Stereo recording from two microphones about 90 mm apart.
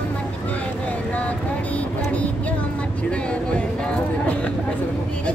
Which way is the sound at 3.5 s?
15° left (ahead or behind).